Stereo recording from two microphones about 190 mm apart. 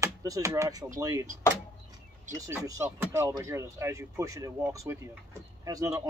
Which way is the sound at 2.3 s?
15° right (ahead or behind).